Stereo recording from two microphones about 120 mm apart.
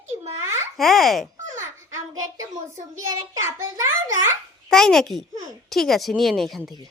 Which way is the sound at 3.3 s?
25° right (ahead or behind).